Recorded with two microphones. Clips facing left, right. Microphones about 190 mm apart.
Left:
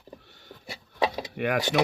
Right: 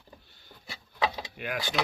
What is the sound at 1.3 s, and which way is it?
Speech, 65° left (ahead or behind).